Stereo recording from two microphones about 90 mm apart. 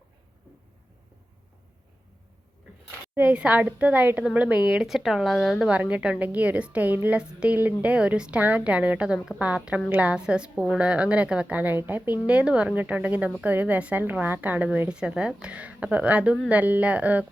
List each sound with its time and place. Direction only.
3.2 s a woman's voice: 15° right (ahead or behind)
4.7 s speech: 5° right (ahead or behind)
5.6 s a woman's voice: 15° right (ahead or behind)